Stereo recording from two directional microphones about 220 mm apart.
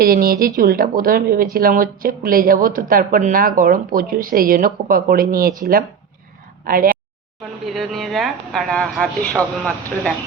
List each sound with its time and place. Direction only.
0.0 s speech: 40° right (ahead or behind)
6.7 s speech: 40° right (ahead or behind)
7.7 s speech: centre (ahead or behind)